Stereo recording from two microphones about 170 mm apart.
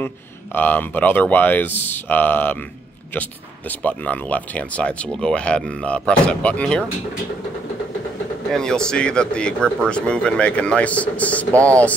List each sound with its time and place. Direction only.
0.6 s speech: 10° left (ahead or behind)
3.8 s speech: 10° left (ahead or behind)
8.5 s speech: 5° left (ahead or behind)